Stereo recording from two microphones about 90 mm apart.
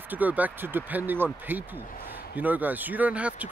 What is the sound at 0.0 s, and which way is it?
Speech, 20° right (ahead or behind).